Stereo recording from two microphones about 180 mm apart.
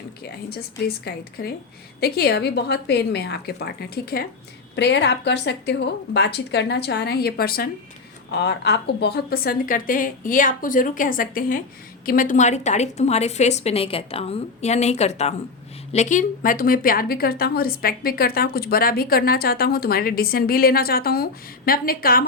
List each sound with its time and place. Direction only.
0.2 s a woman's voice: 60° left (ahead or behind)
4.7 s a woman's voice: 75° left (ahead or behind); by 7.7 s 55° left (ahead or behind)
8.3 s a woman's voice: 70° left (ahead or behind); by 22.3 s 55° left (ahead or behind)